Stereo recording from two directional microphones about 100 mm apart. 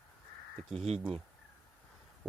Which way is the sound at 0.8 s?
85° right.